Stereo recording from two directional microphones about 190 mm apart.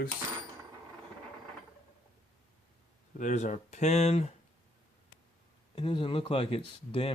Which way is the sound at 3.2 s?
40° left (ahead or behind).